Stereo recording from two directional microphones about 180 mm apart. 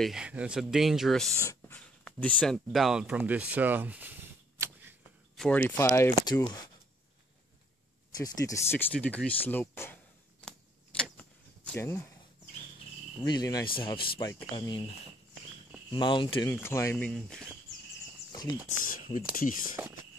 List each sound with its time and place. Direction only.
0.0 s speech: 5° right (ahead or behind)
1.4 s speech: 15° left (ahead or behind); by 4.1 s 10° right (ahead or behind)
5.3 s speech: 5° left (ahead or behind); by 6.7 s 20° left (ahead or behind)
8.1 s speech: 20° left (ahead or behind)
11.0 s vehicle: 5° left (ahead or behind)
13.2 s speech: 20° left (ahead or behind)
16.4 s speech: 15° left (ahead or behind)
18.9 s speech: 50° left (ahead or behind)